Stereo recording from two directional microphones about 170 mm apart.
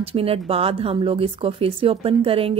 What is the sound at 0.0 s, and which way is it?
Speech, 35° right (ahead or behind).